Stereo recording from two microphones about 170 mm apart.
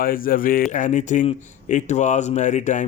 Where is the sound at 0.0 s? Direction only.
60° left (ahead or behind).